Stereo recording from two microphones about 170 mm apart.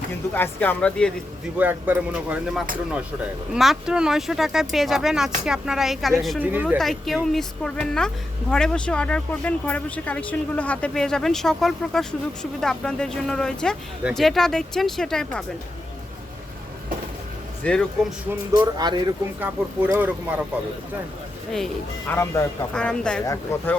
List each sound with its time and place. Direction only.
0.3 s speech: 10° left (ahead or behind)
1.5 s a woman's voice: 10° right (ahead or behind)
6.7 s a woman's voice: centre (ahead or behind)
17.6 s speech: 5° left (ahead or behind)
18.5 s speech: 25° right (ahead or behind)
19.4 s speech: 10° right (ahead or behind)
22.1 s a woman's voice: 15° left (ahead or behind)
23.2 s speech: 15° left (ahead or behind)